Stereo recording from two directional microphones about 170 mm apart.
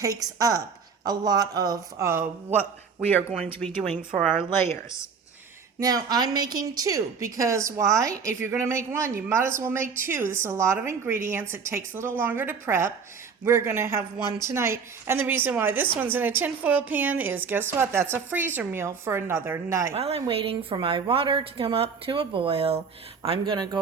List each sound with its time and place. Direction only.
0.0 s speech: 20° right (ahead or behind)
2.6 s speech: 10° left (ahead or behind)
3.2 s a woman's voice: 5° right (ahead or behind)
3.4 s speech: 5° left (ahead or behind)
5.8 s a woman's voice: 25° right (ahead or behind)
19.9 s a woman's voice: 35° right (ahead or behind)